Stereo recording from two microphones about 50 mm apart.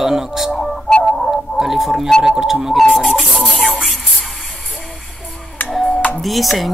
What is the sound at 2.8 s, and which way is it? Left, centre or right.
Music, centre.